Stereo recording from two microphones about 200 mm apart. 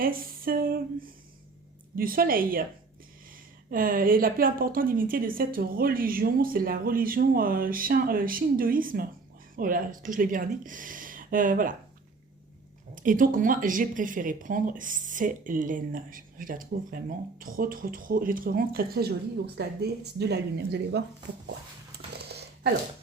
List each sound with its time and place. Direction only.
0.0 s speech: 45° right (ahead or behind)
3.7 s speech: 45° right (ahead or behind)
13.0 s speech: 40° right (ahead or behind)
22.2 s a sound: 55° right (ahead or behind)